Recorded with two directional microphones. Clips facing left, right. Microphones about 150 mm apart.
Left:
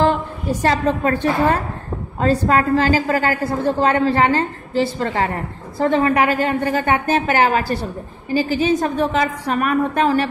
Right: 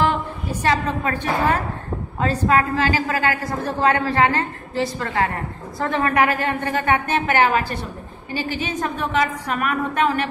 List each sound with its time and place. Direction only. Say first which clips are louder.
0.6 s a woman's voice: left 3 dB; 35° left (ahead or behind)